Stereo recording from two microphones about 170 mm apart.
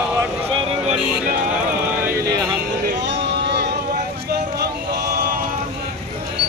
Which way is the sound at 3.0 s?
80° right.